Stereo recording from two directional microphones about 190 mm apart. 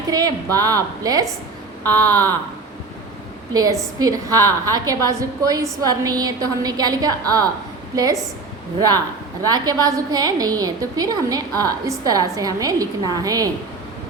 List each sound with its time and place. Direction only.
0.1 s a woman's voice: 20° right (ahead or behind)
3.5 s a woman's voice: 20° right (ahead or behind)
9.4 s a woman's voice: 20° right (ahead or behind)